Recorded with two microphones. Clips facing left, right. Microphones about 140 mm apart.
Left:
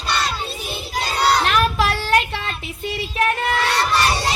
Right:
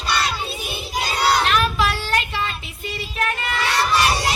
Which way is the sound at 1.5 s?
50° left (ahead or behind).